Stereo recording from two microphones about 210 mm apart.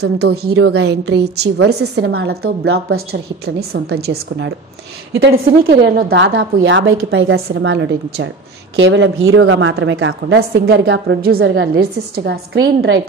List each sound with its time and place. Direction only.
0.0 s a woman's voice: 50° right (ahead or behind)
0.5 s a woman's voice: 90° right
0.8 s a woman's voice: 50° right (ahead or behind)
2.6 s a woman's voice: 80° right
3.1 s a woman's voice: 50° right (ahead or behind)